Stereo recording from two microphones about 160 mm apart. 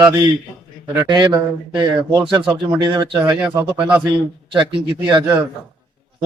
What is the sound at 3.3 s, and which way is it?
Speech, 10° right (ahead or behind).